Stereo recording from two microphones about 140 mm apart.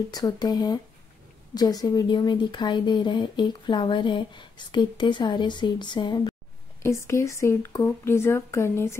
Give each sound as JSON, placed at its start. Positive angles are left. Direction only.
{"t": 0.1, "sound": "a woman's voice", "side_deg": 30}
{"t": 6.8, "sound": "speech", "side_deg": 20}